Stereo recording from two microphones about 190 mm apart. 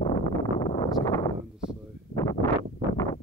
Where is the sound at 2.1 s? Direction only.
50° left (ahead or behind).